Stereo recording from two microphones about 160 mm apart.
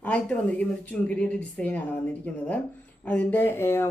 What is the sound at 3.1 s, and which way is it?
Speech, 10° left (ahead or behind).